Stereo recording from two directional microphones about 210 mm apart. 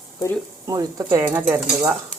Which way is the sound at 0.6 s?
15° right (ahead or behind).